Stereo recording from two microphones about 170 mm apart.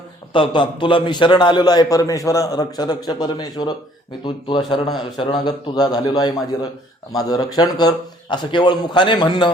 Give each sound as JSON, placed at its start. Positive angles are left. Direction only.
{"t": 0.3, "sound": "a man's voice", "side_deg": 30}